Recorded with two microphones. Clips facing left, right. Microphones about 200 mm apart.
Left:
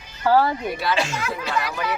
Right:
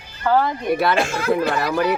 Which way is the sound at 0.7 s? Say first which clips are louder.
Right 5 dB; 55° right (ahead or behind).